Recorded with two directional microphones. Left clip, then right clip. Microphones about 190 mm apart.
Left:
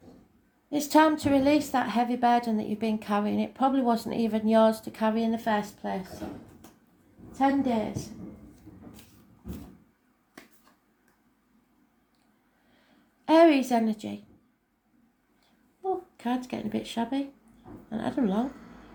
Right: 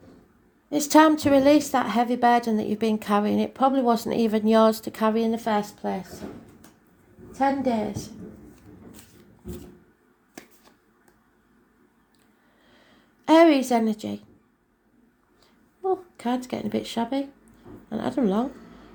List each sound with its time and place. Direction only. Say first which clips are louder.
0.7 s a woman's voice: right 4 dB; 40° right (ahead or behind)
7.3 s a woman's voice: right 2 dB; 35° right (ahead or behind)
13.2 s a woman's voice: right 3 dB; 40° right (ahead or behind)
15.8 s a woman's voice: right 5 dB; 40° right (ahead or behind)